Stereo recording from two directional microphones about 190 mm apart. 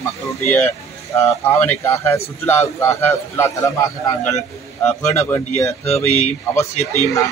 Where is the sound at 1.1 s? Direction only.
10° left (ahead or behind).